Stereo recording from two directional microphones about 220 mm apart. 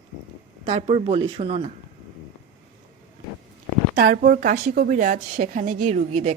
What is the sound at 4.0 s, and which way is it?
A woman's voice, 40° right (ahead or behind).